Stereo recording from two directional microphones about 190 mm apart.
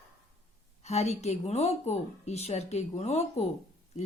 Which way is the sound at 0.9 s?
35° left (ahead or behind).